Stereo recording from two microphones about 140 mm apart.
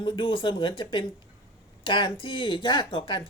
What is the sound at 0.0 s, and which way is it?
Speech, 35° left (ahead or behind).